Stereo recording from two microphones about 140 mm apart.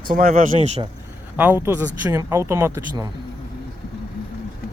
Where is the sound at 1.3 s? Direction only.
15° right (ahead or behind).